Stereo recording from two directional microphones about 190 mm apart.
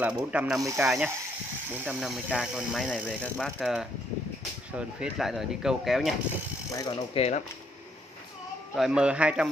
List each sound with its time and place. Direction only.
0.0 s speech: 5° right (ahead or behind)
0.6 s speech: 15° right (ahead or behind)
0.8 s speech: centre (ahead or behind)
6.7 s speech: 20° left (ahead or behind)
7.2 s speech: 35° left (ahead or behind)
8.7 s speech: 5° right (ahead or behind)